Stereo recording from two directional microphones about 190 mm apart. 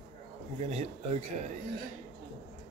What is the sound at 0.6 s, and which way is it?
Speech, 35° right (ahead or behind).